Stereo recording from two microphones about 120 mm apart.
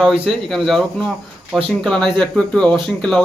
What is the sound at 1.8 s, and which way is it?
Speech, 5° left (ahead or behind).